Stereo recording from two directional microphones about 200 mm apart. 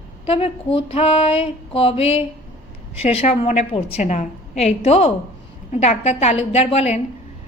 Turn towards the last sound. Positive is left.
turn(degrees=30)  # may be behind; listen again after turning